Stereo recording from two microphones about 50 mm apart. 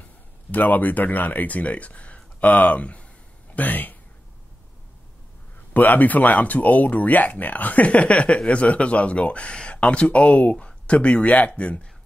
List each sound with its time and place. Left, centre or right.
0.5 s speech: left
5.7 s speech: left